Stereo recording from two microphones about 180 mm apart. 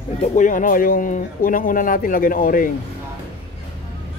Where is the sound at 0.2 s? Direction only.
45° left (ahead or behind).